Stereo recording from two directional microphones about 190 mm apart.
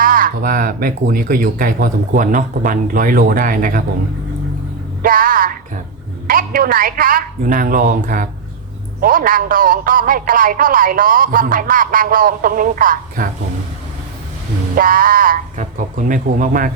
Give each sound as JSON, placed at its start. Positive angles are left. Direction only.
{"t": 0.0, "sound": "a man's voice", "side_deg": -45}
{"t": 5.0, "sound": "music", "side_deg": -45}
{"t": 6.2, "sound": "a man's voice", "side_deg": -50}
{"t": 14.8, "sound": "a man's voice", "side_deg": -45}